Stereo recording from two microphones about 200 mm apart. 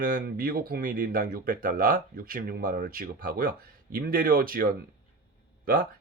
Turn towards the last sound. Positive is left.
turn(degrees=-45)  # may be behind; listen again after turning